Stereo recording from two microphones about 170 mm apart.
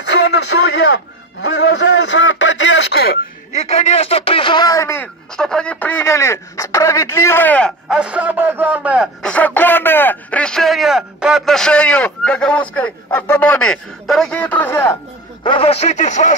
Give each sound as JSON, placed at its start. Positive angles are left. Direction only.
{"t": 0.0, "sound": "a man's voice", "side_deg": 90}
{"t": 3.6, "sound": "speech", "side_deg": 35}
{"t": 7.9, "sound": "a man's voice", "side_deg": -5}
{"t": 9.2, "sound": "speech", "side_deg": 10}
{"t": 15.4, "sound": "speech", "side_deg": 30}